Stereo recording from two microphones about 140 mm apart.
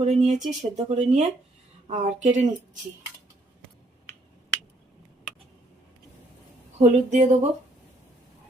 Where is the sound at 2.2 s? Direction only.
60° right (ahead or behind).